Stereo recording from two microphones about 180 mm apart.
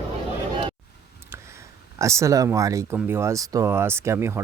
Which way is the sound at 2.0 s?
15° right (ahead or behind).